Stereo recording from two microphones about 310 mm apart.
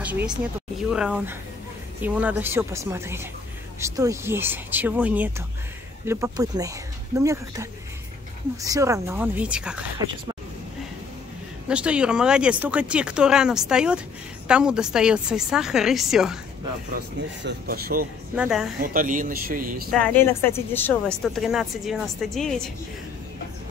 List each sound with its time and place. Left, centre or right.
0.0 s speech: centre
11.7 s speech: centre
16.9 s speech: right
18.3 s speech: centre
18.8 s speech: right
19.9 s a woman's voice: centre